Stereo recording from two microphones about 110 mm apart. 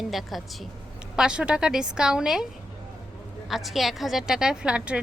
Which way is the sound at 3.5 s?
Centre (ahead or behind).